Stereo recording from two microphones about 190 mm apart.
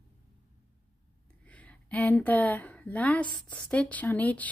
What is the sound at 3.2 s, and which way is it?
Speech, 25° left (ahead or behind).